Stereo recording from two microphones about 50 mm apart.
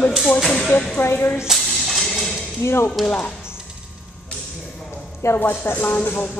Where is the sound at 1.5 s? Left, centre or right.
Centre.